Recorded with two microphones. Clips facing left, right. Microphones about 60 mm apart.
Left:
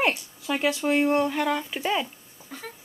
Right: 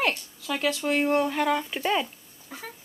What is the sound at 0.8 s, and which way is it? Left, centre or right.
Speech, centre.